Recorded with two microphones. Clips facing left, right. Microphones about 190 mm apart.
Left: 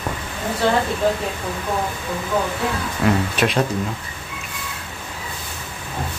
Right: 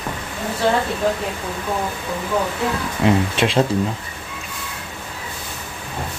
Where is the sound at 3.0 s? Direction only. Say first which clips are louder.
Right 2 dB; 25° right (ahead or behind).